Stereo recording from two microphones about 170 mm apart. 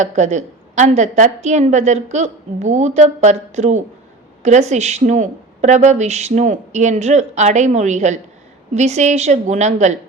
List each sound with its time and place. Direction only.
0.0 s a woman's voice: 45° right (ahead or behind)